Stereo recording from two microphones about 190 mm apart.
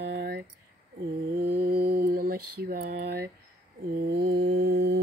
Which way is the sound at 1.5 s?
55° right (ahead or behind).